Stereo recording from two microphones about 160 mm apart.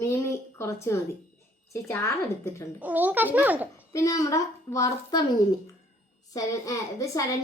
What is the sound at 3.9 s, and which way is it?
A woman's voice, 20° left (ahead or behind).